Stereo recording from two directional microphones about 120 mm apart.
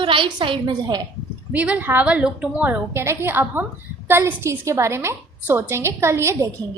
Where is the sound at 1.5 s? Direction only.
10° right (ahead or behind).